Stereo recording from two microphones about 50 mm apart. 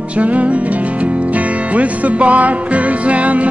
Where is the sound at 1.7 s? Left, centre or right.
Right.